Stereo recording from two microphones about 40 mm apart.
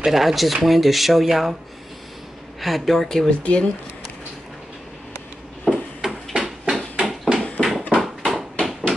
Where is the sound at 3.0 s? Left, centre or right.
Centre.